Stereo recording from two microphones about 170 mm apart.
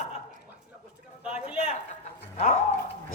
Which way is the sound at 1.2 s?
5° right (ahead or behind).